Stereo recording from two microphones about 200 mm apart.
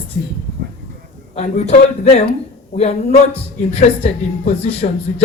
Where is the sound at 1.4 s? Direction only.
35° left (ahead or behind).